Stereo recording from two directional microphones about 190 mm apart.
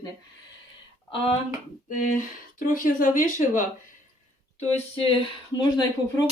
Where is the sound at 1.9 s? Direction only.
45° left (ahead or behind).